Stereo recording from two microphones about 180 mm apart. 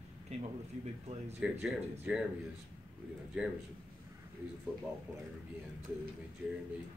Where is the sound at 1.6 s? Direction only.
5° right (ahead or behind).